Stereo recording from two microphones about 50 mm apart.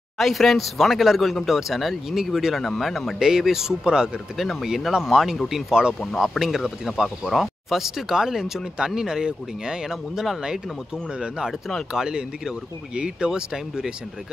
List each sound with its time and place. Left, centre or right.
0.2 s speech: centre
4.4 s speech: centre